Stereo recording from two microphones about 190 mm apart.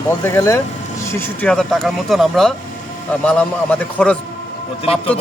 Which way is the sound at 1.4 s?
5° left (ahead or behind).